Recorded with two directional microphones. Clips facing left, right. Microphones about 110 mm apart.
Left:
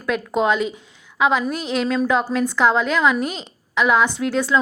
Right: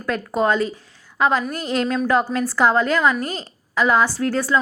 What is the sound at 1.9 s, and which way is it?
Speech, 5° right (ahead or behind).